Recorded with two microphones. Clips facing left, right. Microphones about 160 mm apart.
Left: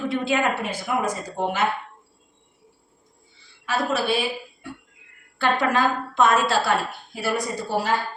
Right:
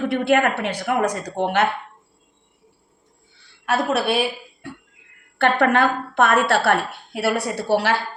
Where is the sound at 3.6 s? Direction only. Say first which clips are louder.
Right 3 dB; 65° right (ahead or behind).